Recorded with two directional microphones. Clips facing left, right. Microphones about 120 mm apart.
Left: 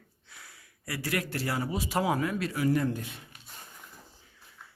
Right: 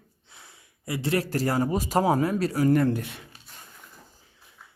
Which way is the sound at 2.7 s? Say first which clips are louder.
Right 6 dB; 70° right (ahead or behind).